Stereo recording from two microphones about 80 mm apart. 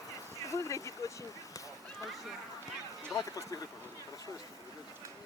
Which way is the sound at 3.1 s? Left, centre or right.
Left.